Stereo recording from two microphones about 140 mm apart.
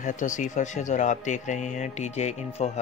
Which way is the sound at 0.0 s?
60° left (ahead or behind).